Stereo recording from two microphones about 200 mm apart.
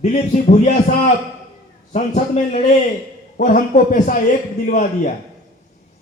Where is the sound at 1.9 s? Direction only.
35° left (ahead or behind).